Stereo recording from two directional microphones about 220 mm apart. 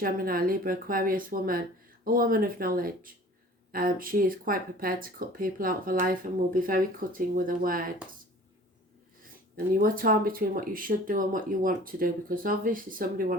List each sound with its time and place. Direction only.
0.0 s speech: 40° right (ahead or behind)
9.8 s speech: 40° right (ahead or behind)